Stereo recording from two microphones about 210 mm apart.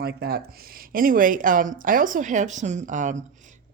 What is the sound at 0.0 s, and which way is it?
Speech, 50° right (ahead or behind).